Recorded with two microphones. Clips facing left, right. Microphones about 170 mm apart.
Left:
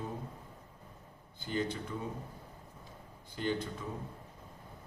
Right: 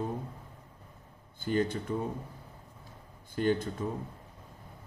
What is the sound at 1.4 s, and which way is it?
Speech, 50° right (ahead or behind).